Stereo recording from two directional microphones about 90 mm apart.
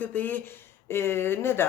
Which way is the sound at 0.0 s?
20° left (ahead or behind).